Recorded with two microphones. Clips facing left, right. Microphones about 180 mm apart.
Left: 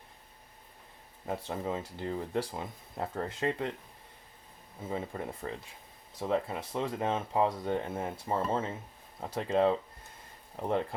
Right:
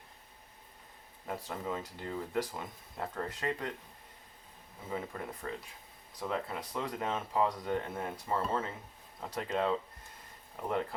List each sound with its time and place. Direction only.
1.5 s speech: 25° left (ahead or behind)
4.9 s speech: 25° left (ahead or behind)